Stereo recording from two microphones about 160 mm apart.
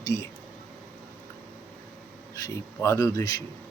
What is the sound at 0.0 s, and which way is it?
Speech, 20° left (ahead or behind).